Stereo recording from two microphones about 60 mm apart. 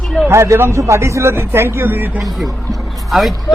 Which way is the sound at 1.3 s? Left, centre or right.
Right.